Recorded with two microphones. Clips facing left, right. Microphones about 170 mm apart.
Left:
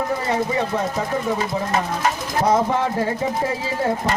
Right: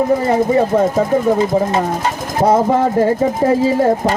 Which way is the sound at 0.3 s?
45° right (ahead or behind).